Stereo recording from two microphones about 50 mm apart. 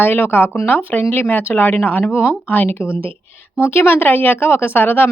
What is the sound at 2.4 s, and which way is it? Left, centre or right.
Speech, left.